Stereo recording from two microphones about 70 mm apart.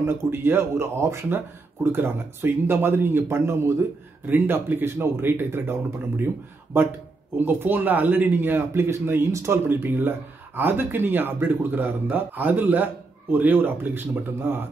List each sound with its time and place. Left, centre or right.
0.0 s speech: right